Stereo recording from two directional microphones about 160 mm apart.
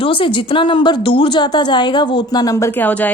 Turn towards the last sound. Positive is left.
turn(degrees=10)  # may be behind; listen again after turning